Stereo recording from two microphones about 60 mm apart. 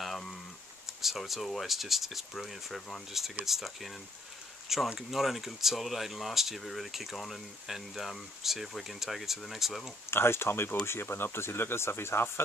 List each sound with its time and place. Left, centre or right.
0.0 s a sound: centre
1.0 s speech: centre
4.9 s speech: centre
10.1 s speech: left